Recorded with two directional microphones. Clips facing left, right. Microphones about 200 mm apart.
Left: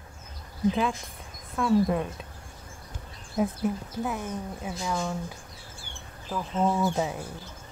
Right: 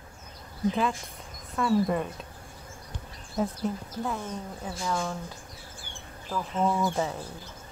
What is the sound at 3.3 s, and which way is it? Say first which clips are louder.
Speech: left 2 dB; 10° left (ahead or behind).